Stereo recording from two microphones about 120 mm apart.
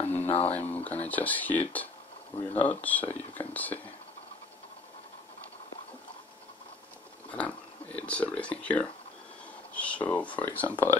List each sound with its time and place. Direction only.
0.0 s a sound: 15° left (ahead or behind)
0.3 s speech: 55° left (ahead or behind)
0.6 s speech: 15° left (ahead or behind)
2.5 s speech: 60° left (ahead or behind)
2.8 s speech: 15° left (ahead or behind)
7.2 s speech: 10° left (ahead or behind)